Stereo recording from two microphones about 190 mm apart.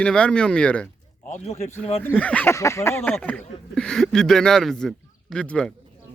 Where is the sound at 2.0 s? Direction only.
10° left (ahead or behind).